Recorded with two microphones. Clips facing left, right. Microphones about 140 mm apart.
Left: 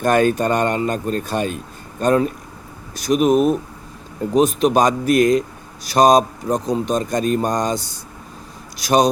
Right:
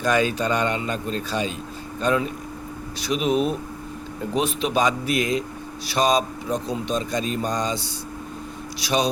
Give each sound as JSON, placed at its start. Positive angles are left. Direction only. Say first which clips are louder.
{"t": 0.0, "sound": "speech", "louder": "left 5 dB", "side_deg": 50}